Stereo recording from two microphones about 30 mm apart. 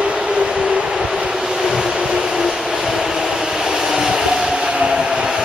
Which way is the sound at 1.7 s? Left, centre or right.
Centre.